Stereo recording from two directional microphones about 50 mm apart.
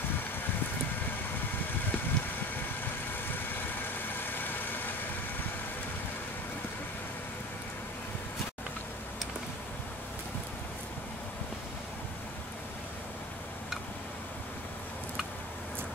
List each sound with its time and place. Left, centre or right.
1.9 s vehicle: left